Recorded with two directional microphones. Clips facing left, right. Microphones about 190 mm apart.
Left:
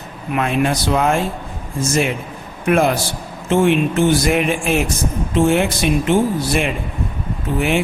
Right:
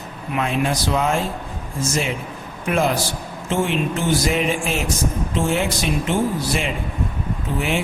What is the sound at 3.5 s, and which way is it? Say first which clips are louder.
Speech: left 6 dB; 60° left (ahead or behind).